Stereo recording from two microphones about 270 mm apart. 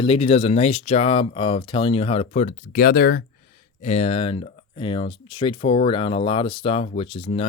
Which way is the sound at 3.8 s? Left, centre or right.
Left.